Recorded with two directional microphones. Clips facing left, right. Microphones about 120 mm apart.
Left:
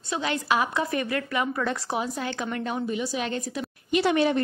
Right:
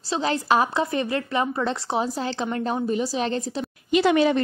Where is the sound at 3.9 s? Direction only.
90° right.